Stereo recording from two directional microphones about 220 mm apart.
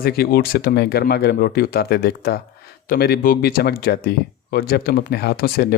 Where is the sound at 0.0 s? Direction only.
45° left (ahead or behind).